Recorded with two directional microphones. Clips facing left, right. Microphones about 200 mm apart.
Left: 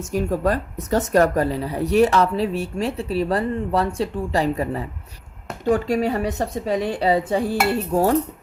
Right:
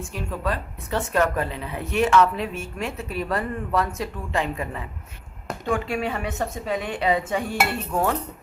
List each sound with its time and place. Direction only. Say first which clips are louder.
0.0 s speech: left 8 dB; 40° left (ahead or behind)